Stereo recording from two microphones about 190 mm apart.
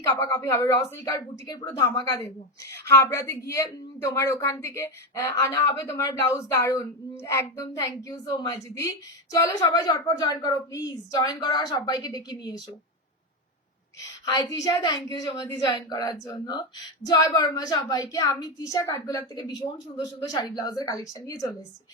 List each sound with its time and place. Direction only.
0.2 s a woman's voice: 15° left (ahead or behind)
14.6 s a woman's voice: 20° left (ahead or behind)